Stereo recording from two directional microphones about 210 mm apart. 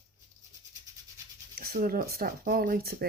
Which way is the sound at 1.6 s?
45° right (ahead or behind).